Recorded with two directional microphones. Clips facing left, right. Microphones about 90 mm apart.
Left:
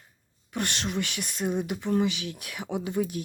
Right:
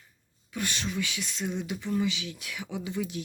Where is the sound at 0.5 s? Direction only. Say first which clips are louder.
Left 2 dB; 65° left (ahead or behind).